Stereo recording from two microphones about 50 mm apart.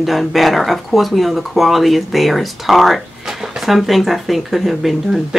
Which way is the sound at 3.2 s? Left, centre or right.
Centre.